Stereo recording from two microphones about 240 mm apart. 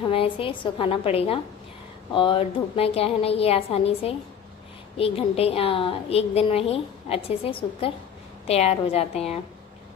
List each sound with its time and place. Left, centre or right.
0.1 s a woman's voice: left